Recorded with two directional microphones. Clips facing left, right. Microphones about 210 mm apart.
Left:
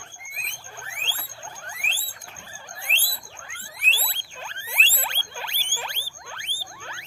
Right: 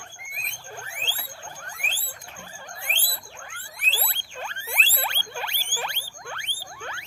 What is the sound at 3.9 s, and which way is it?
Rodents, 55° right (ahead or behind).